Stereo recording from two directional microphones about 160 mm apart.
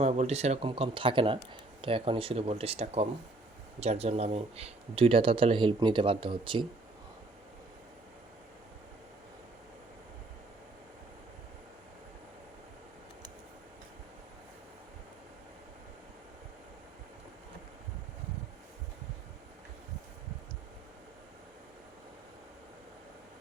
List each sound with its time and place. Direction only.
0.0 s speech: 40° right (ahead or behind)